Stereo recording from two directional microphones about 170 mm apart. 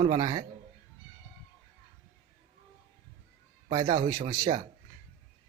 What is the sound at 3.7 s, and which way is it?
Speech, 25° right (ahead or behind).